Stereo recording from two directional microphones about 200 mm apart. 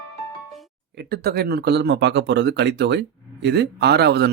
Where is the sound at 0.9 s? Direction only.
50° right (ahead or behind).